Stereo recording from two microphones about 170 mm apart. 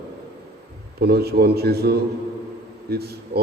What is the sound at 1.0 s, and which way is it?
A man's voice, 70° right (ahead or behind).